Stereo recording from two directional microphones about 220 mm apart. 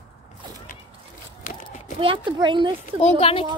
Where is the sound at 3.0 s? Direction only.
25° left (ahead or behind).